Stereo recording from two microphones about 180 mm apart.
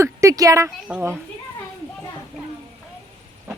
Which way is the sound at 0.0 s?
15° right (ahead or behind).